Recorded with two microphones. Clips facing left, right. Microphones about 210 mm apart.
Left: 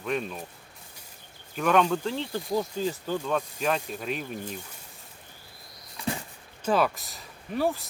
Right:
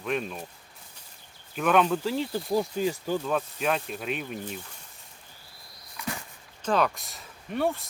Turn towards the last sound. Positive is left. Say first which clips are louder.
# even
turn(degrees=0)  # may be behind; listen again after turning